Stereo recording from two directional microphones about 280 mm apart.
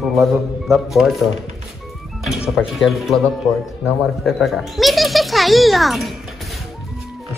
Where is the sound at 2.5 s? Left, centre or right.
Centre.